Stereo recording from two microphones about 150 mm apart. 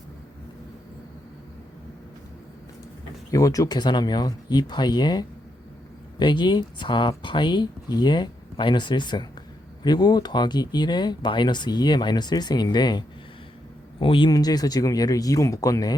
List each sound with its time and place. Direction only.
3.3 s speech: 25° left (ahead or behind)